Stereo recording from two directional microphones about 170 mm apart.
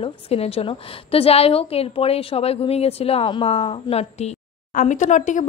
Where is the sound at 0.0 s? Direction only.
35° left (ahead or behind).